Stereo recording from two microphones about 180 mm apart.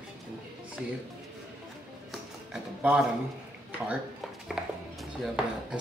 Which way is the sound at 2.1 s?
5° right (ahead or behind).